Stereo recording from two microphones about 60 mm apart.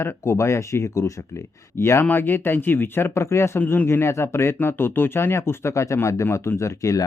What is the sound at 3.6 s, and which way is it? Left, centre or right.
Speech, left.